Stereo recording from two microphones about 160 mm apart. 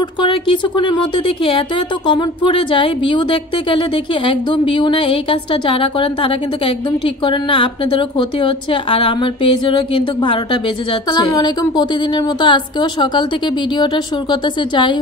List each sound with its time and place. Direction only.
0.2 s speech: 30° left (ahead or behind)